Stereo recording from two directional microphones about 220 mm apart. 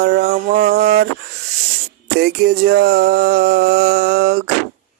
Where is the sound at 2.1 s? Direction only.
45° right (ahead or behind).